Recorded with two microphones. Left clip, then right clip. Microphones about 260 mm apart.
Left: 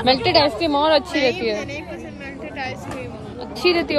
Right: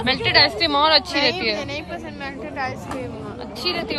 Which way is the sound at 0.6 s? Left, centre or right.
Right.